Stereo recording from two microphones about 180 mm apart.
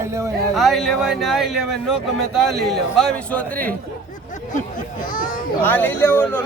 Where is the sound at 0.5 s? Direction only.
Centre (ahead or behind).